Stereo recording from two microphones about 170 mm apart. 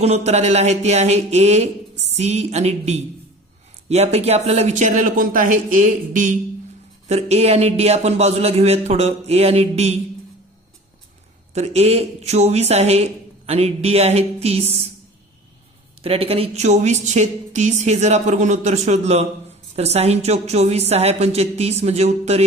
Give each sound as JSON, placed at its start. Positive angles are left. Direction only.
{"t": 0.0, "sound": "a woman's voice", "side_deg": -40}
{"t": 7.1, "sound": "speech", "side_deg": -40}
{"t": 11.5, "sound": "speech", "side_deg": -40}
{"t": 16.0, "sound": "a woman's voice", "side_deg": -35}